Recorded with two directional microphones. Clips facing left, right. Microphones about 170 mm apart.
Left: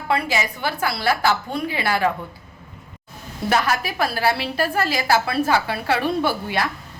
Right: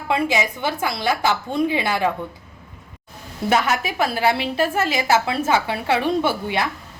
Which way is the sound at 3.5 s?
20° right (ahead or behind).